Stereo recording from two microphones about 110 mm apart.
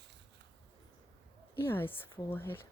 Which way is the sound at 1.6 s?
20° left (ahead or behind).